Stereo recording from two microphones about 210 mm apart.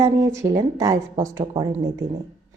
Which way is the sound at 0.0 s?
15° right (ahead or behind).